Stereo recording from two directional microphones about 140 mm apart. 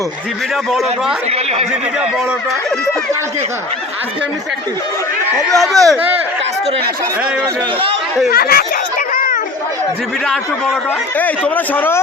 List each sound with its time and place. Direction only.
5.5 s speech: centre (ahead or behind)
8.3 s a sound: 90° left
11.2 s speech: 15° left (ahead or behind)